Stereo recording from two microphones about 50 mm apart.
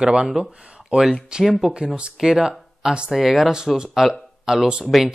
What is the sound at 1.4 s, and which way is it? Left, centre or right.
Speech, centre.